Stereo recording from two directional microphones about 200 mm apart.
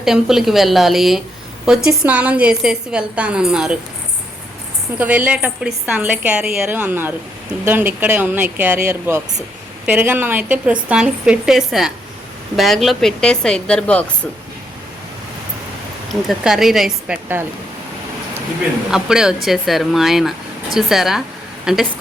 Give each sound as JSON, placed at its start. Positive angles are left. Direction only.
{"t": 0.0, "sound": "a woman's voice", "side_deg": 0}
{"t": 4.9, "sound": "a woman's voice", "side_deg": -10}
{"t": 16.2, "sound": "a woman's voice", "side_deg": 0}
{"t": 18.9, "sound": "a woman's voice", "side_deg": -5}